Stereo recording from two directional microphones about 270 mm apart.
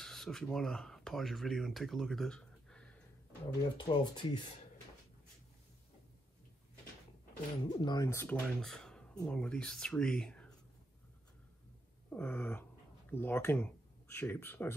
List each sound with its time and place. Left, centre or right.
0.0 s speech: centre
3.4 s speech: centre
7.7 s speech: centre
12.1 s speech: centre